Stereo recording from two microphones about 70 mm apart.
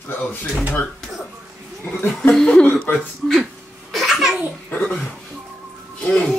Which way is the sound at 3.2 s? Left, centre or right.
Centre.